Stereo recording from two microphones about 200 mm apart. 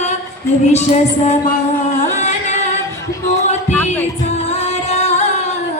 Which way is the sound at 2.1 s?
35° left (ahead or behind).